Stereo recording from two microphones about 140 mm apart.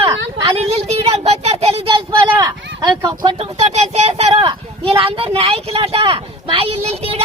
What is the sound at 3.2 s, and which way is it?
Speech, 40° right (ahead or behind).